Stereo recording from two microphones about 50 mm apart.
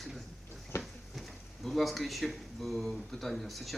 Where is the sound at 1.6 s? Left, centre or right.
Centre.